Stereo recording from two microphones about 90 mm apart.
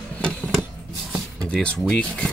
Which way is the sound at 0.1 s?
15° left (ahead or behind).